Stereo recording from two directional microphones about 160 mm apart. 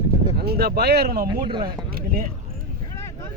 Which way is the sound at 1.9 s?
65° right (ahead or behind).